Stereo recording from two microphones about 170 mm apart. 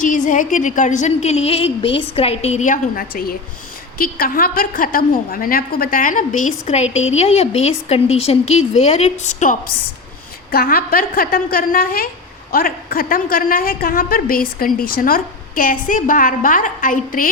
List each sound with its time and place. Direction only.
0.0 s a woman's voice: 50° left (ahead or behind)